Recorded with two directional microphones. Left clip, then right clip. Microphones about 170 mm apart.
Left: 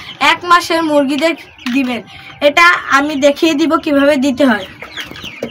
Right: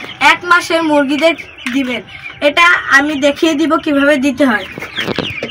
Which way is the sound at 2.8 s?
35° left (ahead or behind).